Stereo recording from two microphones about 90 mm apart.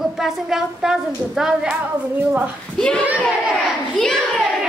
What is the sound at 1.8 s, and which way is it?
Speech, 20° right (ahead or behind).